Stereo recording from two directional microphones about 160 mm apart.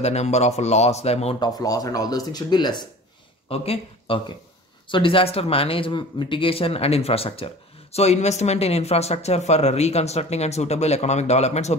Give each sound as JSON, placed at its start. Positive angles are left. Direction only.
{"t": 0.0, "sound": "speech", "side_deg": 45}
{"t": 1.4, "sound": "speech", "side_deg": 25}
{"t": 3.4, "sound": "speech", "side_deg": 35}